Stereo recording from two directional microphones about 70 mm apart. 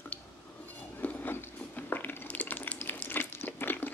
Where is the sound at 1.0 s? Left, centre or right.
Left.